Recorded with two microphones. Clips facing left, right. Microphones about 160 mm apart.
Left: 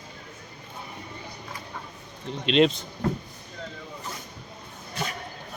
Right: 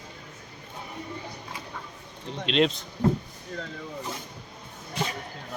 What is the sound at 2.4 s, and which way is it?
Speech, centre (ahead or behind).